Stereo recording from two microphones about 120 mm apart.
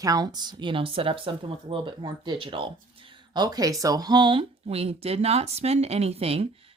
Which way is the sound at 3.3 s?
35° right (ahead or behind).